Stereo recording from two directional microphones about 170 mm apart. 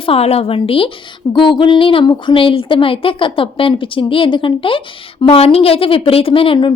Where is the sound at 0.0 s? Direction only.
35° left (ahead or behind).